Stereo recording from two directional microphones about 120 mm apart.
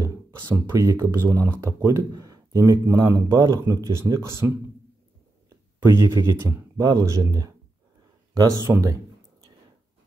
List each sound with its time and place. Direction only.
0.5 s speech: 25° right (ahead or behind)
5.8 s speech: 25° right (ahead or behind)
8.6 s speech: 25° right (ahead or behind)